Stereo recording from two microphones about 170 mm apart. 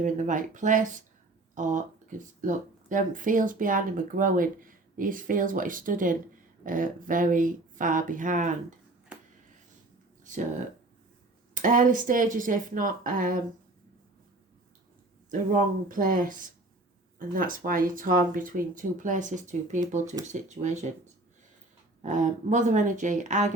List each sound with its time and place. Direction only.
0.0 s speech: 50° right (ahead or behind)
11.5 s speech: 50° right (ahead or behind)
15.3 s speech: 50° right (ahead or behind)